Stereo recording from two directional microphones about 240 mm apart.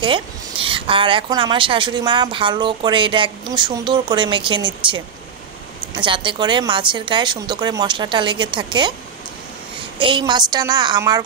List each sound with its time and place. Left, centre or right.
0.0 s speech: right
9.9 s a woman's voice: right